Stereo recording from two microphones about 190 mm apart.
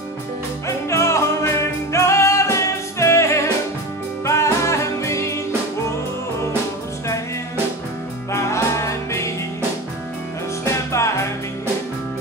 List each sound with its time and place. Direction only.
0.7 s music: 15° left (ahead or behind)
8.3 s music: 15° left (ahead or behind)
10.6 s music: 15° left (ahead or behind)